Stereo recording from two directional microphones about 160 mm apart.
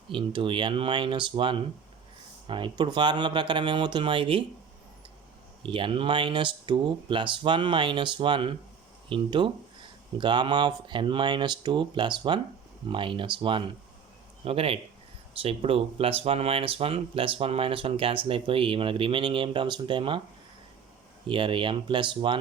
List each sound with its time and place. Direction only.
0.1 s speech: 30° right (ahead or behind)
5.6 s speech: 35° right (ahead or behind)
21.2 s speech: 30° right (ahead or behind)